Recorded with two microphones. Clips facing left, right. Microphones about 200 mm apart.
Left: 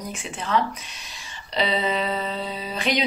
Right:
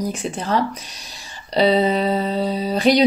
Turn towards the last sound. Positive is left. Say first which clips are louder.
# right 9 dB
turn(degrees=-35)  # may be behind; listen again after turning